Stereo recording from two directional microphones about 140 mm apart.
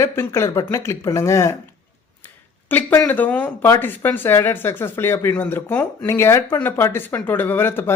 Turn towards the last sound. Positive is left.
turn(degrees=15)  # may be behind; listen again after turning